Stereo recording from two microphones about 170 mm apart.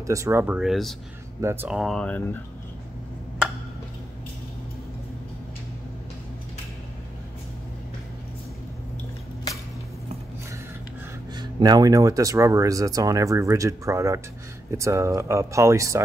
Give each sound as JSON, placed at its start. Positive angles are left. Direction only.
{"t": 0.0, "sound": "speech", "side_deg": -20}
{"t": 1.4, "sound": "speech", "side_deg": -15}
{"t": 1.8, "sound": "speech", "side_deg": 5}
{"t": 11.3, "sound": "speech", "side_deg": -25}